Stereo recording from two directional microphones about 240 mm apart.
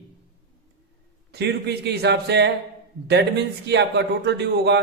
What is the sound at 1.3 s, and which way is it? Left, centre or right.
A man's voice, right.